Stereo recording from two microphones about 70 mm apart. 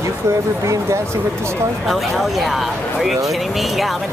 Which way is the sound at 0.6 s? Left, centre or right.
Right.